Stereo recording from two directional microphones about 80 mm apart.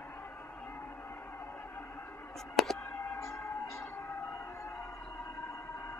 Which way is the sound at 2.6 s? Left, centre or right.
Centre.